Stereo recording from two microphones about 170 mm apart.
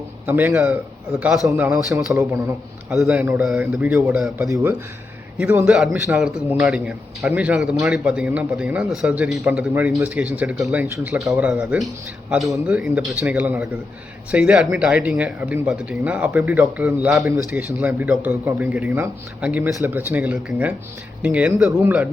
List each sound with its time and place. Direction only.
0.3 s a man's voice: 10° right (ahead or behind)
5.6 s a man's voice: centre (ahead or behind)
10.8 s a man's voice: 15° right (ahead or behind)